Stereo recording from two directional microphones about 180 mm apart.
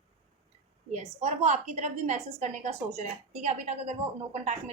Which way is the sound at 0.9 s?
40° right (ahead or behind).